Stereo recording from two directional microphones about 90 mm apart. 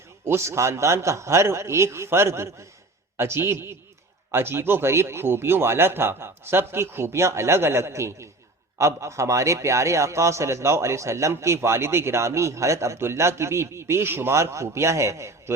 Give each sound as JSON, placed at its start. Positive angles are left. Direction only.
{"t": 0.3, "sound": "a man's voice", "side_deg": -30}